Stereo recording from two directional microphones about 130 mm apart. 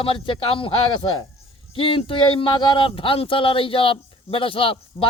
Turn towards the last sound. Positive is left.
turn(degrees=45)  # may be behind; listen again after turning